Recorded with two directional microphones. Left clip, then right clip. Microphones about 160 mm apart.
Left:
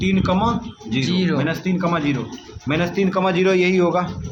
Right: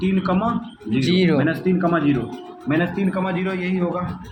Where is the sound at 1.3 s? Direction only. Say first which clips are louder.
Right 2 dB; 45° left (ahead or behind).